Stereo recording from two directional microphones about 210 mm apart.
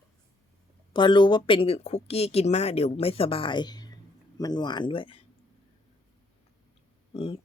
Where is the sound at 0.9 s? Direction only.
20° left (ahead or behind).